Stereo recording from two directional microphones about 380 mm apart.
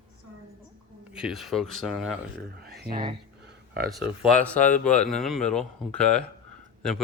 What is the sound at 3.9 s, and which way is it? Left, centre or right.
A man's voice, centre.